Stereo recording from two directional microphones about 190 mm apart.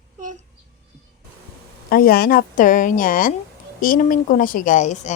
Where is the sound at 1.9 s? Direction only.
50° left (ahead or behind).